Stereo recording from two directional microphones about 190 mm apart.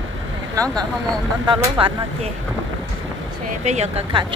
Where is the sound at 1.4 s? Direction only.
25° right (ahead or behind).